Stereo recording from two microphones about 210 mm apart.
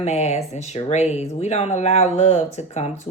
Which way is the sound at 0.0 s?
30° left (ahead or behind).